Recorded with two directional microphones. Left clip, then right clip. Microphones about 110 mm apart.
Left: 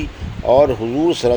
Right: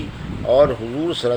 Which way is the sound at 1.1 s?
45° left (ahead or behind).